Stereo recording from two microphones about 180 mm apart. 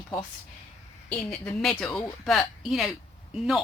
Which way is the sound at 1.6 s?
5° left (ahead or behind).